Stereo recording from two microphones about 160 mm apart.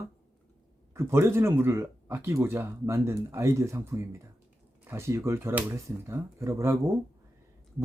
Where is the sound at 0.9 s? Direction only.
15° right (ahead or behind).